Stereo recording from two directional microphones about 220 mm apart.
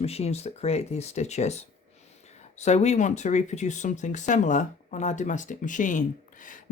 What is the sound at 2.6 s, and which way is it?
Speech, 30° left (ahead or behind).